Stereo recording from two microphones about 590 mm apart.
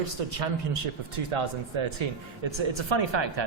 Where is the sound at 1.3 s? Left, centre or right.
Right.